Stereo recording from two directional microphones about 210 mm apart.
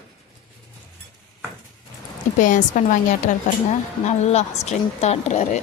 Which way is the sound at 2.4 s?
35° left (ahead or behind).